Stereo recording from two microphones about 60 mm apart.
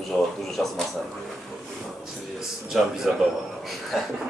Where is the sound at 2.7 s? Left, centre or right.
Centre.